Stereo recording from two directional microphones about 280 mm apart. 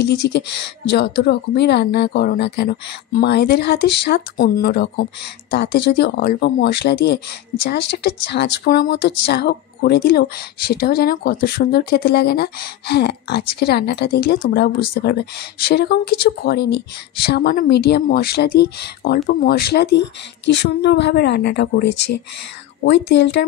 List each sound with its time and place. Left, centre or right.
0.0 s speech: left
21.8 s speech: left
23.0 s speech: left